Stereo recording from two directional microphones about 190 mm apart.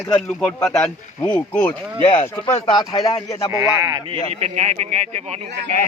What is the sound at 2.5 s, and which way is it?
Speech, 30° left (ahead or behind).